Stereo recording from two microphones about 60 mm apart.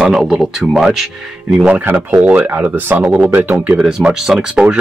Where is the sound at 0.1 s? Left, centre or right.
Centre.